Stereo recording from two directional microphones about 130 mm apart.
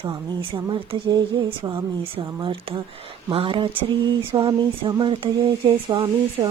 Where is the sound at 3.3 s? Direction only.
45° right (ahead or behind).